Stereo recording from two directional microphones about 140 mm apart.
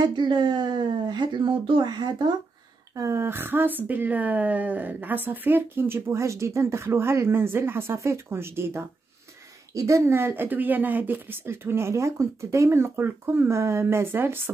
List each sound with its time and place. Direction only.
0.0 s speech: 35° right (ahead or behind)
3.0 s speech: 20° right (ahead or behind)